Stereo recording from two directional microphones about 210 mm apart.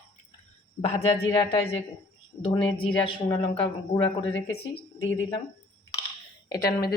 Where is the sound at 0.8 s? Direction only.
30° left (ahead or behind).